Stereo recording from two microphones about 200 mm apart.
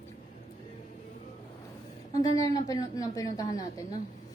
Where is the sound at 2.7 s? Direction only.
15° left (ahead or behind).